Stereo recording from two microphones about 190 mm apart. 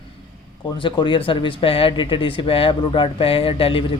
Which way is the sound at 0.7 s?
25° left (ahead or behind).